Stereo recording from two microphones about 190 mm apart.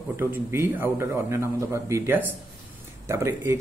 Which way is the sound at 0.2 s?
10° right (ahead or behind).